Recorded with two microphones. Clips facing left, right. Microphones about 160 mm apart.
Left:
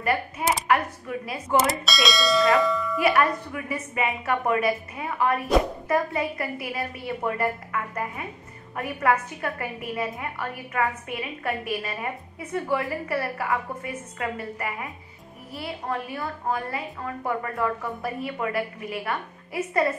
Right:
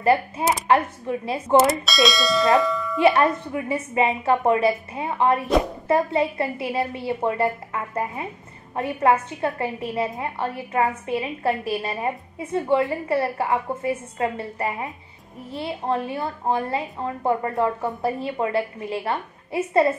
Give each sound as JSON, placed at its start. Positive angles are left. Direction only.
{"t": 0.0, "sound": "a woman's voice", "side_deg": -30}
{"t": 1.6, "sound": "speech", "side_deg": 0}
{"t": 3.0, "sound": "a woman's voice", "side_deg": -25}